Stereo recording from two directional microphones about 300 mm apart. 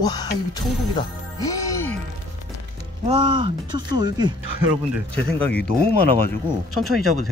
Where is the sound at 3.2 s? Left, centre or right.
Centre.